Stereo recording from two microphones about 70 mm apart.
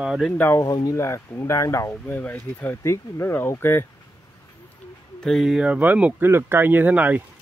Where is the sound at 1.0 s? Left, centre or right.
Left.